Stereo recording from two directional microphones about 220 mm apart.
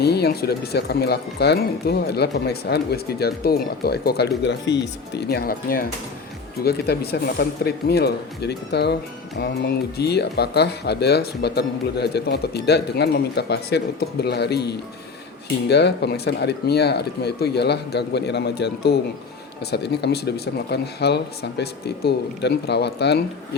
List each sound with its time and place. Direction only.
0.0 s speech: 45° left (ahead or behind)